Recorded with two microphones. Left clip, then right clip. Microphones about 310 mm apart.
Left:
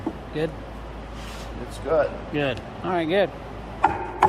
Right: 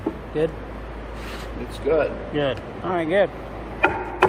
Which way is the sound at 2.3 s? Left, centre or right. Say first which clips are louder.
Right 2 dB; centre.